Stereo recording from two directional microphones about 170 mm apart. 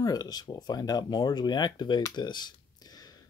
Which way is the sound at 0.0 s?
25° left (ahead or behind).